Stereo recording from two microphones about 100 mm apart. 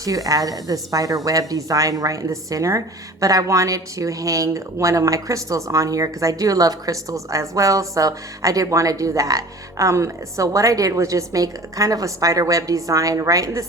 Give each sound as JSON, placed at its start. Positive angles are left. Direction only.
{"t": 0.0, "sound": "a woman's voice", "side_deg": -35}